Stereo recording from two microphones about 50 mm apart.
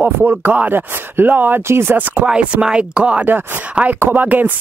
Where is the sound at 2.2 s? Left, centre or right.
Centre.